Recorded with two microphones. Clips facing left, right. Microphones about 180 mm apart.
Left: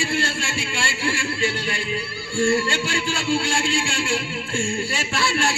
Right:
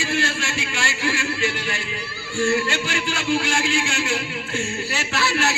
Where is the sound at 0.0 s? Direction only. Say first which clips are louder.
Even; 30° left (ahead or behind).